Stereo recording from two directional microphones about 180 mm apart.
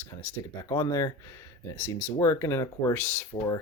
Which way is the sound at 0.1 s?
15° left (ahead or behind).